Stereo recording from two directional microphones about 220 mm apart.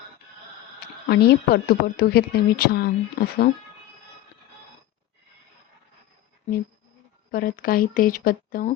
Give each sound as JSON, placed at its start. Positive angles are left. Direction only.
{"t": 1.0, "sound": "a woman's voice", "side_deg": 50}
{"t": 7.3, "sound": "speech", "side_deg": 40}